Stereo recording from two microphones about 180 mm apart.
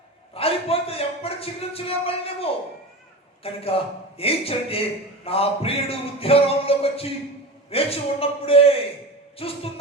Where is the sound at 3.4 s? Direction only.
35° left (ahead or behind).